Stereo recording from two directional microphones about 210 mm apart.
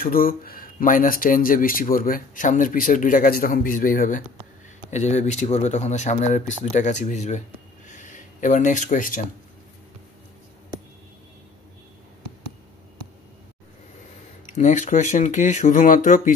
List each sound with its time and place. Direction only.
0.0 s speech: 45° left (ahead or behind)
7.9 s a sound: 35° left (ahead or behind)
14.6 s speech: 35° left (ahead or behind)